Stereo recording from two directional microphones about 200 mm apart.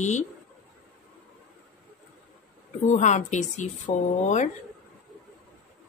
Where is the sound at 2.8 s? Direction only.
35° left (ahead or behind).